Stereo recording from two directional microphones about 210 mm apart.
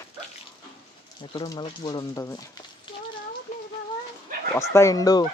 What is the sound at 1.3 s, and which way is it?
Speech, 20° left (ahead or behind).